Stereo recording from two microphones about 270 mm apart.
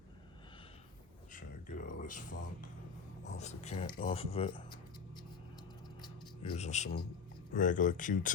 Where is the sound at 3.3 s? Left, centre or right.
Left.